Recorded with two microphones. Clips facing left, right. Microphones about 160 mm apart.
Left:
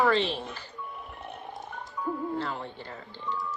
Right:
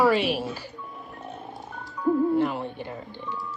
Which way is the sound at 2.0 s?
15° right (ahead or behind).